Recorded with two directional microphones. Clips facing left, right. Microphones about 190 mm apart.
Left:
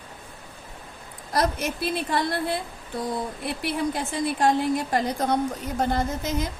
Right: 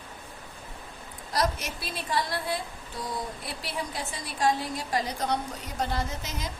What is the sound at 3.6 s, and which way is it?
A woman's voice, 55° left (ahead or behind).